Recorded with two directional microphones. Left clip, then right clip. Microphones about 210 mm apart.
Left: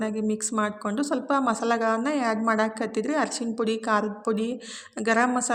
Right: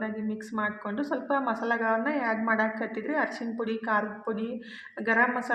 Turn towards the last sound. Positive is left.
turn(degrees=45)  # may be behind; listen again after turning